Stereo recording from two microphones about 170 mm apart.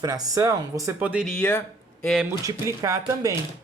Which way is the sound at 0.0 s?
20° right (ahead or behind).